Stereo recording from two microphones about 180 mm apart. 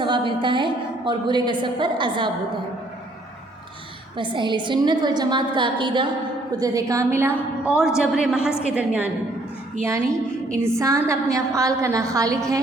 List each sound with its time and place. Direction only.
0.0 s a woman's voice: 25° right (ahead or behind)
4.2 s a woman's voice: 25° right (ahead or behind); by 9.0 s 5° right (ahead or behind)
10.6 s a woman's voice: 15° right (ahead or behind)